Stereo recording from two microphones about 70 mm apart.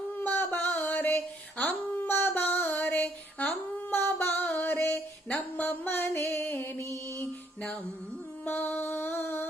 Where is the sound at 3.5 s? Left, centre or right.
Left.